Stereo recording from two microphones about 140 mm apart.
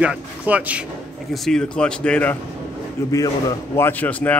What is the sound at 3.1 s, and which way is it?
A man's voice, 25° left (ahead or behind).